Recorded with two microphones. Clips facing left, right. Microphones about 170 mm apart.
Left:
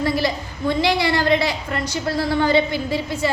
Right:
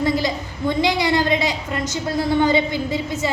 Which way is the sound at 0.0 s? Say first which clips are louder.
Right 1 dB; 20° right (ahead or behind).